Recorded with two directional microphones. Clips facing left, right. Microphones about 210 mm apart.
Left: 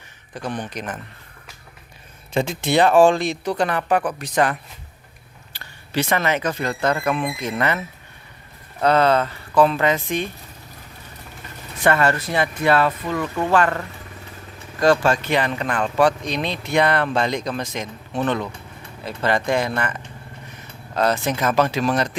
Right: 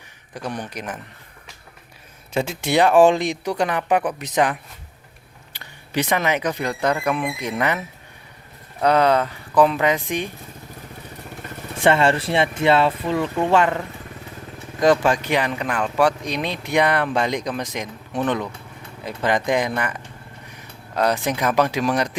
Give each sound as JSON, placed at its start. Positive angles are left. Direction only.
{"t": 0.3, "sound": "speech", "side_deg": -10}
{"t": 2.3, "sound": "speech", "side_deg": -5}
{"t": 5.5, "sound": "speech", "side_deg": -15}
{"t": 8.8, "sound": "speech", "side_deg": -15}
{"t": 11.8, "sound": "speech", "side_deg": -25}